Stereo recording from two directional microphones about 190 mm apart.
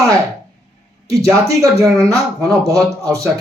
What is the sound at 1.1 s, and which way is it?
Speech, 15° right (ahead or behind).